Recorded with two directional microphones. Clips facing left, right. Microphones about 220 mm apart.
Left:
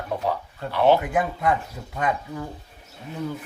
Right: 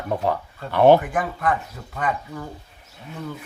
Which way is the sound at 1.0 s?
10° left (ahead or behind).